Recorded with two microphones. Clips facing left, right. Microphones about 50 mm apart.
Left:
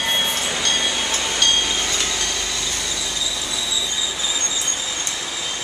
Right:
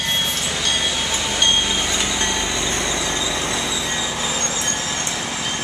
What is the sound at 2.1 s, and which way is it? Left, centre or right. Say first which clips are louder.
Train: right 4 dB; right.